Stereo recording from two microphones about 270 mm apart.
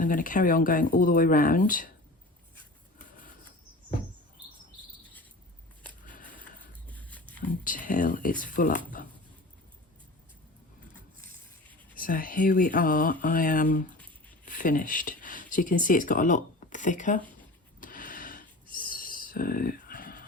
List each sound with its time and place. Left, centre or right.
0.0 s speech: left
6.8 s livestock: centre
7.6 s speech: left
11.9 s speech: left
17.7 s a sound: left